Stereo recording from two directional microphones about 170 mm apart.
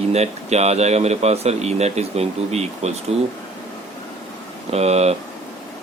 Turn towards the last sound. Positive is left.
turn(degrees=-40)  # may be behind; listen again after turning